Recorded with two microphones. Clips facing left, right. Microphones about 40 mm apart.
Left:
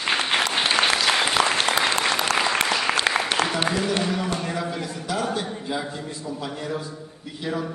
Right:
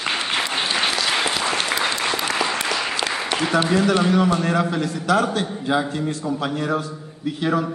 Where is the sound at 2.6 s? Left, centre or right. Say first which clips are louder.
Left 1 dB; left.